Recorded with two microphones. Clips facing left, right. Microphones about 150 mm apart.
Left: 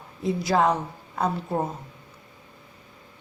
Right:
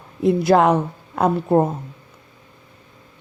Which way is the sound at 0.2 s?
60° right (ahead or behind).